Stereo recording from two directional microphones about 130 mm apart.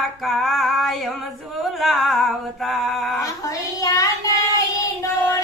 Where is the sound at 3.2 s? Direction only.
25° left (ahead or behind).